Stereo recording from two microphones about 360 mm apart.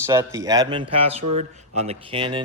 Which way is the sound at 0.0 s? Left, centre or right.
Centre.